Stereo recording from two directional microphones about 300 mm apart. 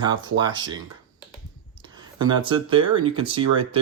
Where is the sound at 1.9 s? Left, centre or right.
Centre.